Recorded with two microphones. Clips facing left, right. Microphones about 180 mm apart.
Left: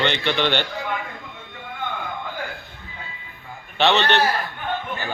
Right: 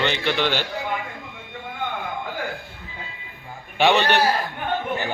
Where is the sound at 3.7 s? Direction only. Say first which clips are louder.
Right 1 dB; 10° right (ahead or behind).